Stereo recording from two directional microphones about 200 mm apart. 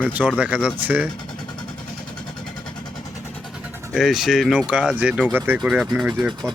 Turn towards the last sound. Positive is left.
turn(degrees=-5)  # may be behind; listen again after turning